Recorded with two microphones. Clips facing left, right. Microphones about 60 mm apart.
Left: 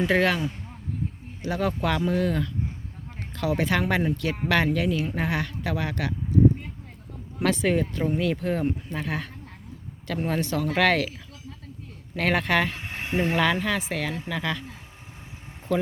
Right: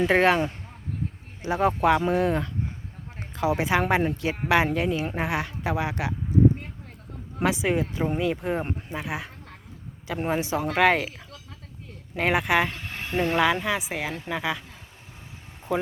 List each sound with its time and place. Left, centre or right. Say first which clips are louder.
0.1 s a woman's voice: right 2 dB; right
7.4 s speech: left 1 dB; centre
12.1 s speech: right 1 dB; centre
12.7 s a sound: left 2 dB; left
13.3 s speech: right 2 dB; centre
15.7 s speech: left 1 dB; centre